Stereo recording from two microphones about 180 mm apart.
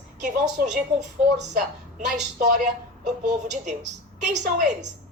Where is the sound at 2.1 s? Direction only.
45° right (ahead or behind).